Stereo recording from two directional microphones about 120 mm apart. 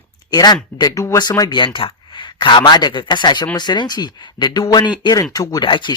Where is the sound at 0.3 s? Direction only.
35° left (ahead or behind).